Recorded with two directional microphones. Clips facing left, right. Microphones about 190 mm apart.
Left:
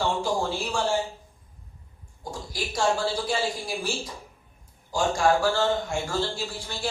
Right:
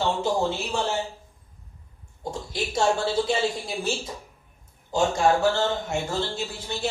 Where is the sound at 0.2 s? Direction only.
20° right (ahead or behind).